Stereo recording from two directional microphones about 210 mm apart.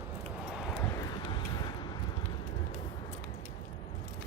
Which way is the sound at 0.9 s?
20° left (ahead or behind).